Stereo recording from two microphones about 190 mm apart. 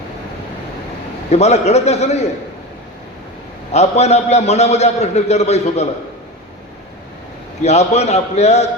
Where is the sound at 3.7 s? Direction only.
35° left (ahead or behind).